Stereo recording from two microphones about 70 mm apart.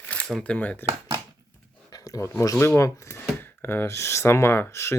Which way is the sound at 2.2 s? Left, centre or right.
Left.